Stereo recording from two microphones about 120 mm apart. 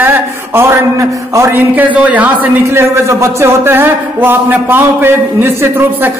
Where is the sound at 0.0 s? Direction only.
20° right (ahead or behind).